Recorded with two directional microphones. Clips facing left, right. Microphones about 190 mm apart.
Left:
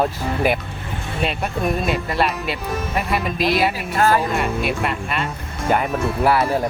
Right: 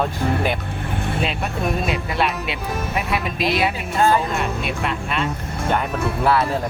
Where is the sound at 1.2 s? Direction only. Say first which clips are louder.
Left 5 dB; centre (ahead or behind).